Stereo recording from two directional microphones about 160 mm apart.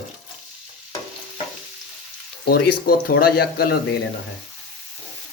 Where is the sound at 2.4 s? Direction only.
70° left (ahead or behind).